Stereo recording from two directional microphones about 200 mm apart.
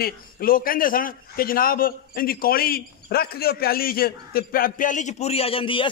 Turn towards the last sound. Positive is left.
turn(degrees=25)  # may be behind; listen again after turning